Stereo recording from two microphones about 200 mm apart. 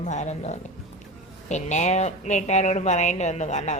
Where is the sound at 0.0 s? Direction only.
35° left (ahead or behind).